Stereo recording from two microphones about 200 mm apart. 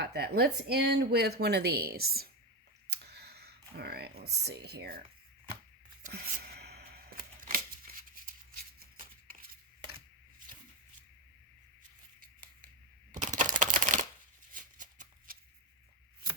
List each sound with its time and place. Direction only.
0.0 s speech: 55° right (ahead or behind)
6.0 s a sound: 40° right (ahead or behind)
12.2 s scissors: 45° right (ahead or behind)
13.1 s typing: 40° right (ahead or behind)
14.5 s shuffling cards: 40° right (ahead or behind)